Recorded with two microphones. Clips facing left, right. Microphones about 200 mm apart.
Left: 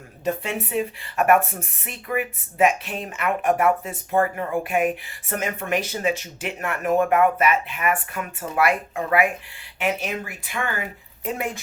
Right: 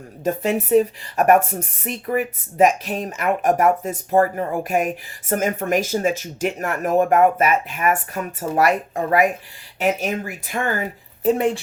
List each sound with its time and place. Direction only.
0.3 s speech: 40° right (ahead or behind)